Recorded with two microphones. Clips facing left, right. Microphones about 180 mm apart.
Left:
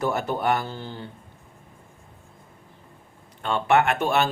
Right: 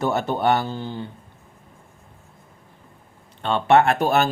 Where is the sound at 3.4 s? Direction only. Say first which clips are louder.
Right 4 dB; 30° right (ahead or behind).